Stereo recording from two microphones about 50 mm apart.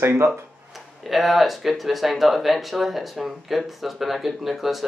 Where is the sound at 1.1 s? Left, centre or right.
Centre.